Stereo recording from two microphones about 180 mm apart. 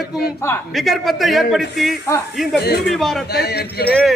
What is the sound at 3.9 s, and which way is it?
Speech, 5° left (ahead or behind).